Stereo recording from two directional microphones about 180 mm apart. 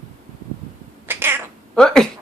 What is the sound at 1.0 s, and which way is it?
Cat, 10° right (ahead or behind).